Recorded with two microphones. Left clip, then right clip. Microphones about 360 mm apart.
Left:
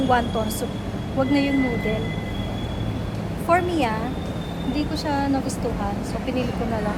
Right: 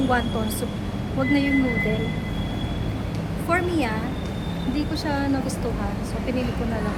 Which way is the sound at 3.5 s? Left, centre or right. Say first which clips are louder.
Left 3 dB; centre.